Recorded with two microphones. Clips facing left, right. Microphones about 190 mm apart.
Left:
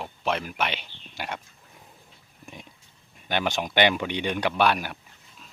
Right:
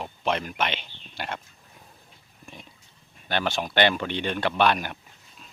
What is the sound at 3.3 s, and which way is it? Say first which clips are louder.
Speech: even; 15° left (ahead or behind).